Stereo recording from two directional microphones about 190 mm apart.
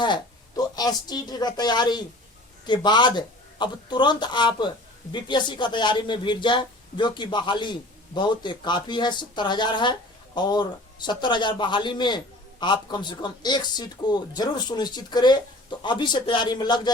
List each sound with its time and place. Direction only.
0.0 s a man's voice: 20° left (ahead or behind)